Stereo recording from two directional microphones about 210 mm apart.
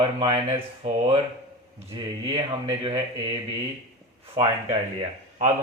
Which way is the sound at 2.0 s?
20° right (ahead or behind).